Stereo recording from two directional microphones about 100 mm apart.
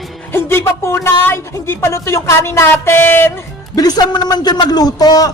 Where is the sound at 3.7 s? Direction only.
40° left (ahead or behind).